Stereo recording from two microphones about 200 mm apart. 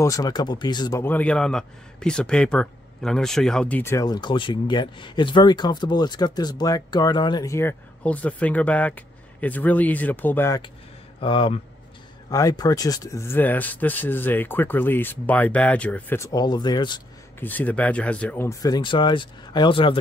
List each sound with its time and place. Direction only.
0.0 s speech: 15° left (ahead or behind)
11.1 s speech: 25° left (ahead or behind)
17.4 s speech: 10° left (ahead or behind); by 20.0 s 25° left (ahead or behind)